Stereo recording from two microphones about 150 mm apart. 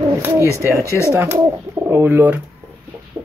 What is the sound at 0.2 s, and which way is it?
Speech, 20° right (ahead or behind).